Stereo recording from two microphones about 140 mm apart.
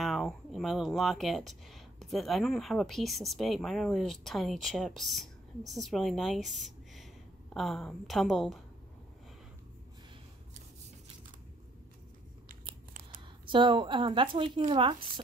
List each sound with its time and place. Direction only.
0.0 s a woman's voice: centre (ahead or behind)
13.5 s speech: 35° right (ahead or behind)